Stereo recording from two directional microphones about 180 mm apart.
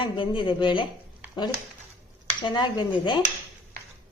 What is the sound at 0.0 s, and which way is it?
Speech, 25° left (ahead or behind).